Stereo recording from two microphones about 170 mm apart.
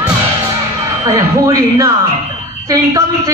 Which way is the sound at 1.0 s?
20° right (ahead or behind).